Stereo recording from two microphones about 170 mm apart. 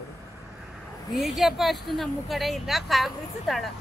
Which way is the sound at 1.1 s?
Centre (ahead or behind).